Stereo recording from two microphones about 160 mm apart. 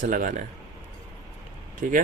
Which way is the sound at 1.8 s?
55° right (ahead or behind).